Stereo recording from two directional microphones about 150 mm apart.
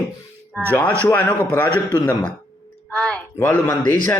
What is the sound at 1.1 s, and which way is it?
Speech, 10° left (ahead or behind).